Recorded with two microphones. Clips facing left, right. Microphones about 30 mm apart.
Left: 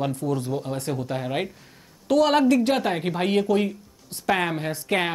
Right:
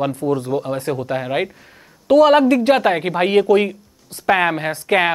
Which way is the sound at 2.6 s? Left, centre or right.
Right.